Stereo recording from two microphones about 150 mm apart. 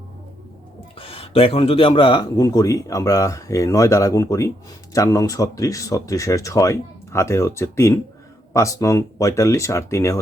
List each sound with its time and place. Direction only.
0.9 s speech: 40° left (ahead or behind); by 10.2 s 20° left (ahead or behind)